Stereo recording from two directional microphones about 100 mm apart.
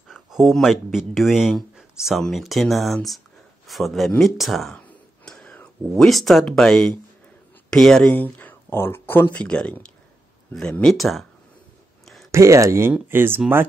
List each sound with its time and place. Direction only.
0.1 s speech: centre (ahead or behind)
4.7 s clicking: 15° left (ahead or behind)
5.9 s speech: centre (ahead or behind)
8.2 s speech: 15° left (ahead or behind); by 11.2 s centre (ahead or behind)
12.3 s speech: 30° right (ahead or behind)